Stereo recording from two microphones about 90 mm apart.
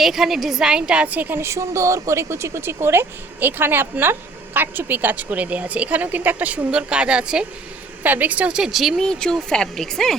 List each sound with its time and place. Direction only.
0.0 s a woman's voice: 5° right (ahead or behind)